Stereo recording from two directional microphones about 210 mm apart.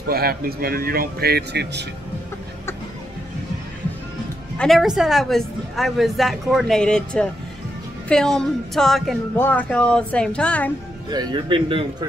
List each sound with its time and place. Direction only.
0.1 s speech: 45° right (ahead or behind)
4.6 s a woman's voice: centre (ahead or behind)
11.1 s speech: 20° right (ahead or behind)